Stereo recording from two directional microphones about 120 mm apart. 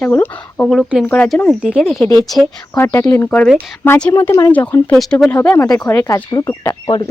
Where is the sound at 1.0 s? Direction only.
15° left (ahead or behind).